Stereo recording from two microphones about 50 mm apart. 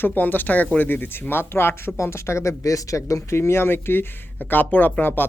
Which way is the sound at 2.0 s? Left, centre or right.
Left.